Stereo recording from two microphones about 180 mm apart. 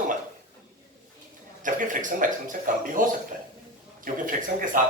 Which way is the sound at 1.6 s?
45° right (ahead or behind).